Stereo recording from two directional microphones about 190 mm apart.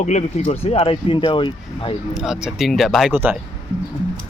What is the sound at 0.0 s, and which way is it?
Speech, 35° left (ahead or behind).